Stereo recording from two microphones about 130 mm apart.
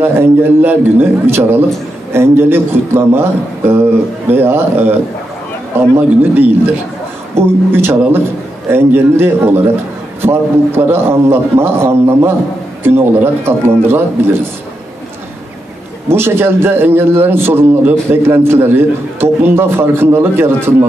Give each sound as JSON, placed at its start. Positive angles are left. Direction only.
{"t": 0.0, "sound": "a man's voice", "side_deg": -20}
{"t": 16.1, "sound": "a man's voice", "side_deg": -20}